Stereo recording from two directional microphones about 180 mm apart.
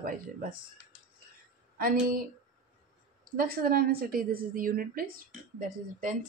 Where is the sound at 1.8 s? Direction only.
55° right (ahead or behind).